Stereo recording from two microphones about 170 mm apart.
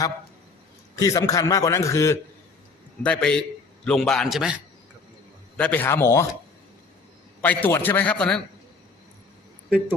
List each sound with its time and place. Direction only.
0.9 s a man's voice: 20° left (ahead or behind)
3.0 s a man's voice: 5° left (ahead or behind)
5.5 s a man's voice: 10° left (ahead or behind)
7.4 s a man's voice: 10° left (ahead or behind)